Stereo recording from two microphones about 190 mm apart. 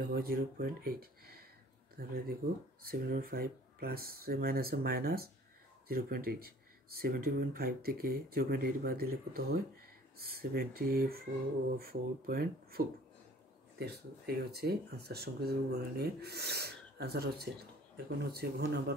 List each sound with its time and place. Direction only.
0.0 s speech: 55° right (ahead or behind)